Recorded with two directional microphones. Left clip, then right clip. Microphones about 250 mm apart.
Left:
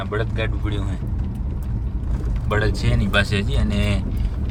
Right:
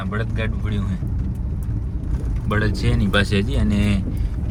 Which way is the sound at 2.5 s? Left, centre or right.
Centre.